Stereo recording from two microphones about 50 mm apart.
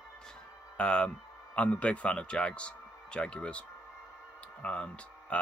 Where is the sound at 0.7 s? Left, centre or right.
Left.